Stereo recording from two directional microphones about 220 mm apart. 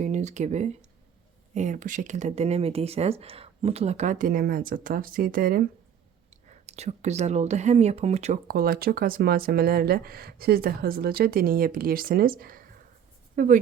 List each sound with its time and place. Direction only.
0.0 s speech: 30° right (ahead or behind)
6.3 s speech: 30° right (ahead or behind)